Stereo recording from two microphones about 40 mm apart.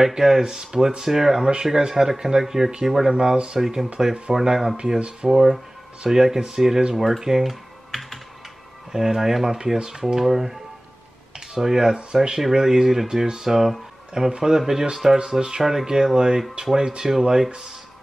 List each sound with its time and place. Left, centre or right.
0.0 s speech: centre
3.1 s speech: centre
3.5 s speech: centre
4.7 s speech: right
6.0 s speech: centre
9.8 s speech: right
12.4 s speech: centre